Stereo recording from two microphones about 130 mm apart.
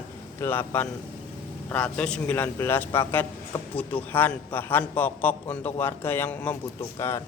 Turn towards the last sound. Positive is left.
turn(degrees=20)  # may be behind; listen again after turning